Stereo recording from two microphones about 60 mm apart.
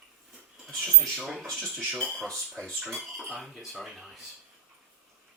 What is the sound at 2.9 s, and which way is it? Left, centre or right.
Speech, centre.